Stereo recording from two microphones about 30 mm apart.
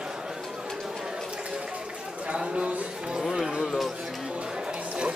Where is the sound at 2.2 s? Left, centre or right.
Right.